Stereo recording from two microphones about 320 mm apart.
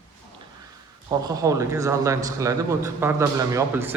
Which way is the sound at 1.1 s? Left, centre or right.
Centre.